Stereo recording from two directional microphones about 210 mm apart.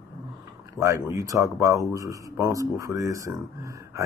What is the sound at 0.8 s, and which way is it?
Speech, 15° right (ahead or behind).